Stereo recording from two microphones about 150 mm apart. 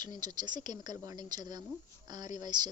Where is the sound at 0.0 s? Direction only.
30° right (ahead or behind).